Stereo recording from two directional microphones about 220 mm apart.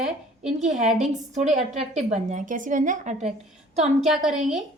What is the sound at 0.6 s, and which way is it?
A woman's voice, 35° right (ahead or behind).